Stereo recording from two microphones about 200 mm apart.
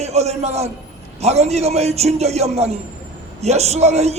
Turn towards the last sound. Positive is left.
turn(degrees=-35)  # may be behind; listen again after turning